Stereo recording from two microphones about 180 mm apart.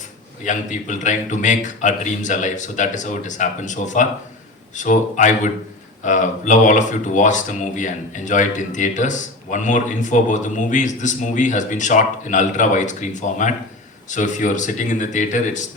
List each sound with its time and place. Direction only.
0.4 s speech: 45° left (ahead or behind)